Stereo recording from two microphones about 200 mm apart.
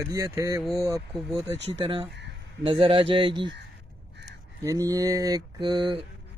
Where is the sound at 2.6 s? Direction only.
25° right (ahead or behind).